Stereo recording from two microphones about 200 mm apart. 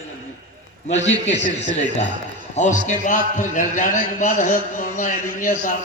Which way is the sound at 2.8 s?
40° left (ahead or behind).